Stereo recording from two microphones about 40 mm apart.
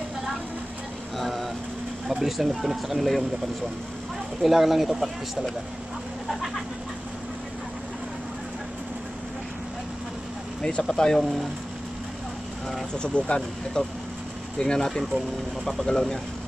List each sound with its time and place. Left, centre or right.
1.1 s a sound: centre
2.0 s speech: centre
4.4 s speech: centre
10.8 s speech: centre
12.9 s speech: left